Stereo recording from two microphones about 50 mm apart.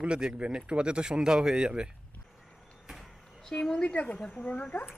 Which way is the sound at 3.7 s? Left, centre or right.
Centre.